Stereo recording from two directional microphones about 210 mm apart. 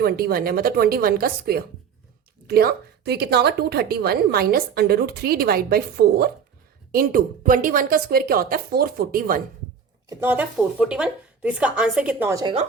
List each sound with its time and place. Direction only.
0.0 s a woman's voice: 45° right (ahead or behind)
10.1 s speech: 10° right (ahead or behind)